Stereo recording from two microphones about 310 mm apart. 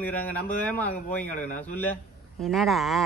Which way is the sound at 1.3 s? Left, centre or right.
Left.